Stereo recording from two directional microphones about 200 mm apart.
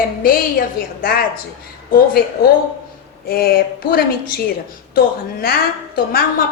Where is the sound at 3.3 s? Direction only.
50° left (ahead or behind).